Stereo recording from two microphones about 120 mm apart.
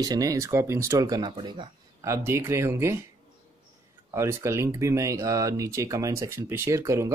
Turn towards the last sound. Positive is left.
turn(degrees=-25)  # may be behind; listen again after turning